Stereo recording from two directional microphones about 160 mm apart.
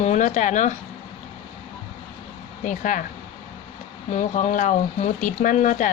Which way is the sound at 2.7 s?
55° left (ahead or behind).